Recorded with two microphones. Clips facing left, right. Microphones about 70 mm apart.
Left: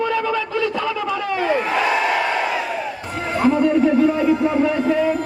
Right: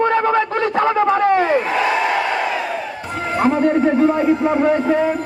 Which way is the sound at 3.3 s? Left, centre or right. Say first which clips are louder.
Right 1 dB; right.